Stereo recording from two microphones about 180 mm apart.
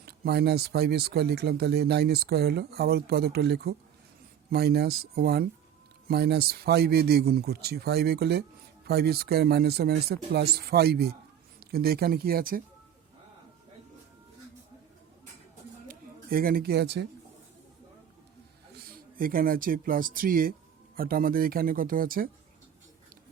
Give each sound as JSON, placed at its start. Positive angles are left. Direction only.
{"t": 0.0, "sound": "speech", "side_deg": -60}
{"t": 15.9, "sound": "speech", "side_deg": -55}
{"t": 18.8, "sound": "speech", "side_deg": -55}